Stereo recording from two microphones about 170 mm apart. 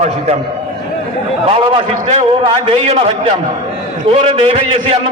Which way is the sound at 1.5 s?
35° right (ahead or behind).